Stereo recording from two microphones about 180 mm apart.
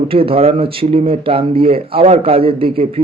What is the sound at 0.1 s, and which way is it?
Speech, 30° right (ahead or behind).